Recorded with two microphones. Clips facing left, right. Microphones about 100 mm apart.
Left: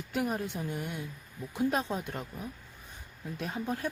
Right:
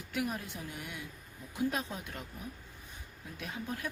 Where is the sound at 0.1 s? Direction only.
35° left (ahead or behind).